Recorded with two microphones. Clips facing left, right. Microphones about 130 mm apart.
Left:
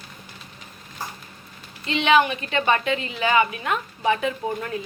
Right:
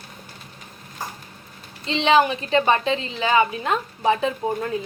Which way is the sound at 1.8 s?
30° right (ahead or behind).